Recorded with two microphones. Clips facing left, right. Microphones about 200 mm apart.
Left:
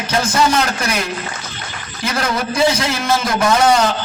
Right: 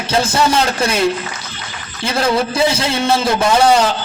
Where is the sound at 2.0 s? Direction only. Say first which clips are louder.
Right 4 dB; 30° right (ahead or behind).